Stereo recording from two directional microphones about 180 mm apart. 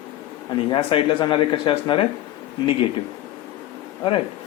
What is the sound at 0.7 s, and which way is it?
Speech, 30° left (ahead or behind).